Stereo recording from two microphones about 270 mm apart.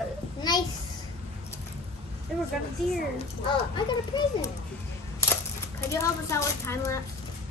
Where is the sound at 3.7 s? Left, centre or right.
Centre.